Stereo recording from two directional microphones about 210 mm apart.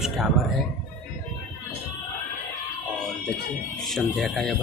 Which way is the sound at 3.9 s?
Centre (ahead or behind).